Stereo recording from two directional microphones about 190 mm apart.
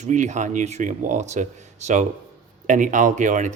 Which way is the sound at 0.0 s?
40° right (ahead or behind).